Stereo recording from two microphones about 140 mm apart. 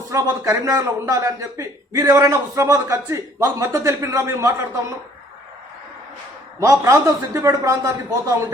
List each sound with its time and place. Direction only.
0.1 s speech: 20° right (ahead or behind)
6.6 s speech: 20° right (ahead or behind)